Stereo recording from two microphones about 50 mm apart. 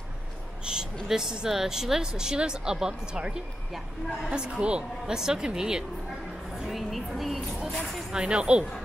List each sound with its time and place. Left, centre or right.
0.7 s a sound: centre
1.0 s speech: centre
3.7 s a woman's voice: centre
4.3 s speech: centre
6.7 s a sound: centre
8.1 s speech: centre